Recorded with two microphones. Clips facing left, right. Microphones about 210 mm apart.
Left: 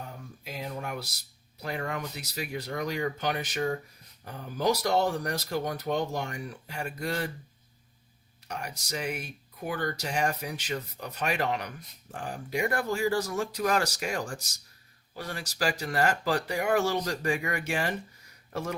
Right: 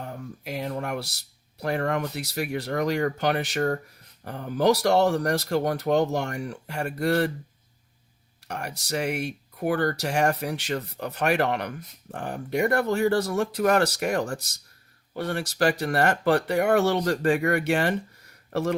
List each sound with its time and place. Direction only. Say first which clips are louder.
0.0 s speech: right 6 dB; 70° right (ahead or behind)
8.4 s speech: right 5 dB; 65° right (ahead or behind)